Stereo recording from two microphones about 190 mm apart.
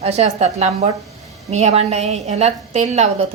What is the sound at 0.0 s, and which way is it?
A woman's voice, 35° right (ahead or behind).